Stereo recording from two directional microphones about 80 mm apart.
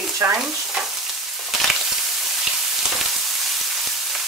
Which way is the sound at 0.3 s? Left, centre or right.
Centre.